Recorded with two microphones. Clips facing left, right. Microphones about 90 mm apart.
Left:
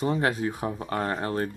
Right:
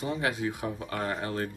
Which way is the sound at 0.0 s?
40° left (ahead or behind).